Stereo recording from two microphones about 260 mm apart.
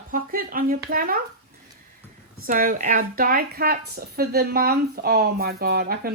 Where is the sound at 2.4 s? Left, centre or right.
Right.